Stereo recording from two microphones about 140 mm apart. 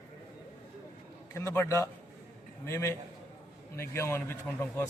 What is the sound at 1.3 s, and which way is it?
A man's voice, 20° left (ahead or behind).